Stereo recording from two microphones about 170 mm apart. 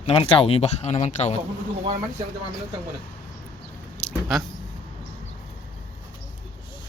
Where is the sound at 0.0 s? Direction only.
35° left (ahead or behind).